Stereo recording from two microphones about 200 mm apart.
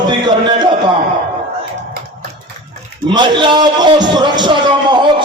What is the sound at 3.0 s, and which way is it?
A man's voice, 25° right (ahead or behind).